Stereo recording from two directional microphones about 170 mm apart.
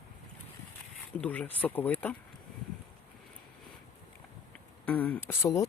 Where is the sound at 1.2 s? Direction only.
10° left (ahead or behind).